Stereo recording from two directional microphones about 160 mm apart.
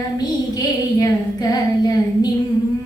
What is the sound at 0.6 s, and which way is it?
Child singing, 25° left (ahead or behind).